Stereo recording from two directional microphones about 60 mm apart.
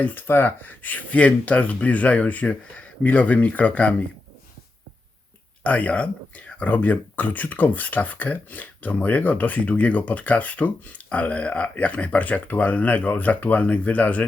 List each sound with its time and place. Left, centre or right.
0.0 s speech: left
5.6 s speech: left